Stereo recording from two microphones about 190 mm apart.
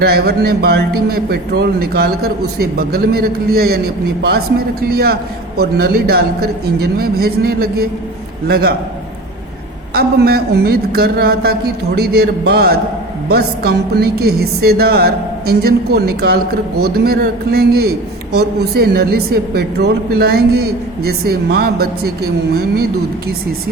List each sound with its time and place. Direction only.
0.0 s a man's voice: 55° right (ahead or behind)
9.9 s a man's voice: 55° right (ahead or behind)